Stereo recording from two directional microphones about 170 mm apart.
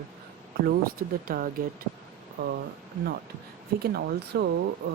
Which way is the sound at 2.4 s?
70° right (ahead or behind).